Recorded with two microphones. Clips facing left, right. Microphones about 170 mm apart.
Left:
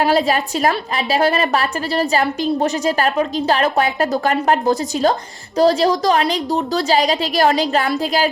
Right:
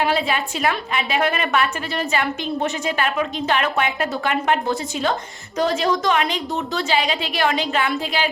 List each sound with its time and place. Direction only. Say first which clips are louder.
0.0 s a woman's voice: left 5 dB; 40° left (ahead or behind)